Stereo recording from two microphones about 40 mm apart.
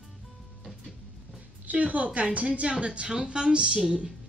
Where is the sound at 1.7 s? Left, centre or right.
Right.